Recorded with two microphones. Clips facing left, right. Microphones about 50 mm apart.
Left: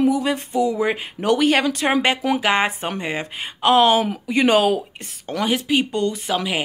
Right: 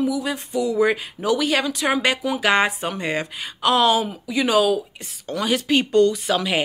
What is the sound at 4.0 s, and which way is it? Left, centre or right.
Speech, left.